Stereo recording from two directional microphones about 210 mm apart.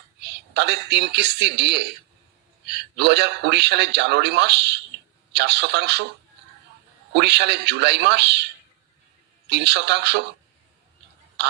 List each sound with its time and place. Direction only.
0.2 s a woman's voice: 55° right (ahead or behind)
7.1 s a man's voice: 55° right (ahead or behind)
9.5 s a man's voice: 55° right (ahead or behind)